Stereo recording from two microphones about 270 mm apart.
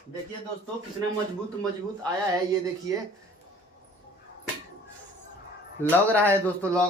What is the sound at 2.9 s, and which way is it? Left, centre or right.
Speech, centre.